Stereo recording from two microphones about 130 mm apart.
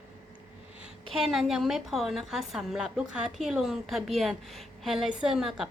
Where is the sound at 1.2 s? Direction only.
5° right (ahead or behind).